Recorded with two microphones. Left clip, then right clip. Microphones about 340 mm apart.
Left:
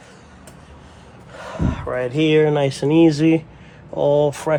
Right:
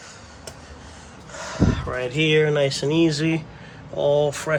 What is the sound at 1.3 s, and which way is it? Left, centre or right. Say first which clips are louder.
Speech: right 2 dB; centre.